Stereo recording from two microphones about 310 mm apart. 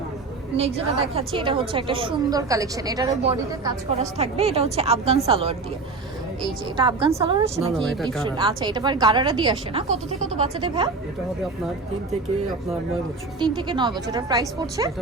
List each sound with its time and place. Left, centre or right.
1.1 s a woman's voice: centre
6.7 s a woman's voice: centre
7.7 s speech: centre
8.4 s a woman's voice: centre
13.4 s a woman's voice: centre